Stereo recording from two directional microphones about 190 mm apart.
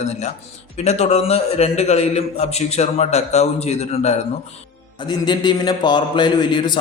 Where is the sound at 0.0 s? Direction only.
35° left (ahead or behind).